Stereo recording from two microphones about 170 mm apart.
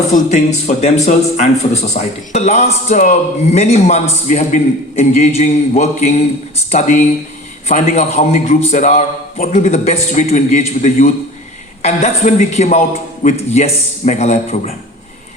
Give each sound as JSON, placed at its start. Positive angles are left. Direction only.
{"t": 0.8, "sound": "a man's voice", "side_deg": 40}